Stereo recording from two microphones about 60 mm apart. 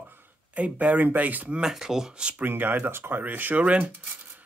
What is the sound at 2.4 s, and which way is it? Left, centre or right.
Speech, right.